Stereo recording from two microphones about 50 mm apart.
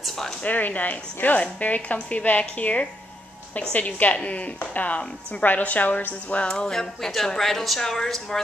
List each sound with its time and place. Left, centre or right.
0.4 s a woman's voice: left
6.4 s speech: centre